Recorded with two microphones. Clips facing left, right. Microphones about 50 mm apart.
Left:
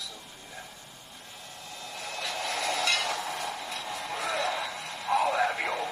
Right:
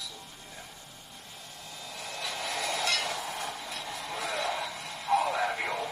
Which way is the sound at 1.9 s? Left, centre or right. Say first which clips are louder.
Left 2 dB; left.